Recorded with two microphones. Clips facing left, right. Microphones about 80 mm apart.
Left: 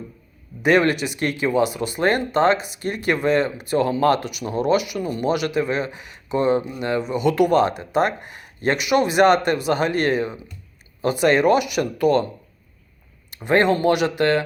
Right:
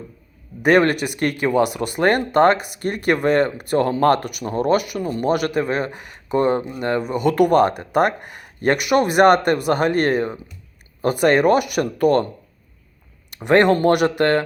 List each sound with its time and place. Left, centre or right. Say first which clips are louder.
0.6 s speech: right 2 dB; right
13.3 s speech: right 3 dB; right